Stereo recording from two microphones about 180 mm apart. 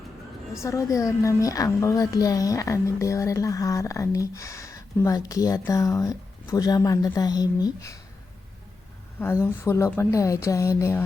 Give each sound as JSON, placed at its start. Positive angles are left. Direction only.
{"t": 0.5, "sound": "a woman's voice", "side_deg": 15}
{"t": 9.1, "sound": "a woman's voice", "side_deg": 10}